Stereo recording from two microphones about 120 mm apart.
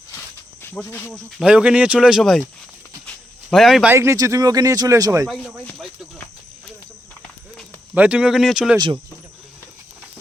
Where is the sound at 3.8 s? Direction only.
20° right (ahead or behind).